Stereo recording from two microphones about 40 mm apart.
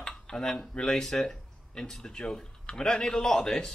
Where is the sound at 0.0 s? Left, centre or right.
Centre.